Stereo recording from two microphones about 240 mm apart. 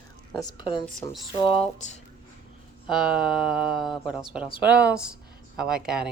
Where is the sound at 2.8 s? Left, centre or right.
Centre.